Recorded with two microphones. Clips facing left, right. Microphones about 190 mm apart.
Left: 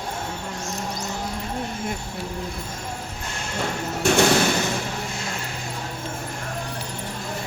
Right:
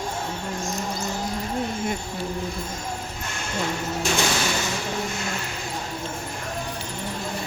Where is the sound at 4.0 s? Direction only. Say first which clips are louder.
Left 8 dB; 60° left (ahead or behind).